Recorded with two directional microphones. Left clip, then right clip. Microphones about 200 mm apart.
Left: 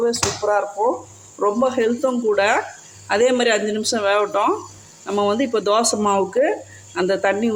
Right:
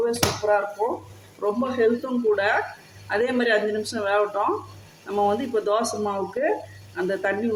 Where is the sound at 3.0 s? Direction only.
40° left (ahead or behind).